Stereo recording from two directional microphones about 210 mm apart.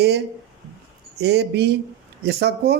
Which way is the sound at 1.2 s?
50° right (ahead or behind).